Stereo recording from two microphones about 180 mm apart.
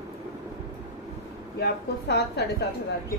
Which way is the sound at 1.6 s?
65° left (ahead or behind).